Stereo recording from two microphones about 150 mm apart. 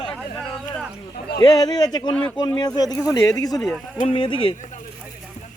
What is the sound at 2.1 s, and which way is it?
Speech, 5° left (ahead or behind).